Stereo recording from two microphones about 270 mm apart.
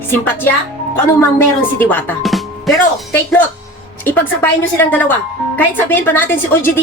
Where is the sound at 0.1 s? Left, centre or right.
Centre.